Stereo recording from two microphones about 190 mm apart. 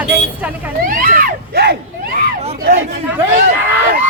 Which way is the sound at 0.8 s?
45° right (ahead or behind).